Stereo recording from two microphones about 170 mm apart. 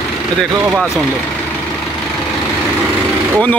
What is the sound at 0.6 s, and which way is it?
Speech, 5° right (ahead or behind).